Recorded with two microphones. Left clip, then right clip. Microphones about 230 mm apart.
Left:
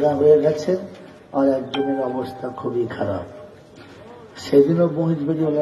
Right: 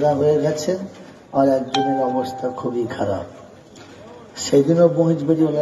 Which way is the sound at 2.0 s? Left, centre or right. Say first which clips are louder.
Right 4 dB; right.